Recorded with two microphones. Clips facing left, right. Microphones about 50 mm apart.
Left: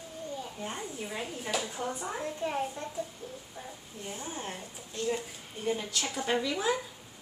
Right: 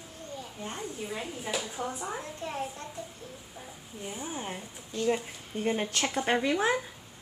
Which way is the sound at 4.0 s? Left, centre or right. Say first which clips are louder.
Right 2 dB; centre.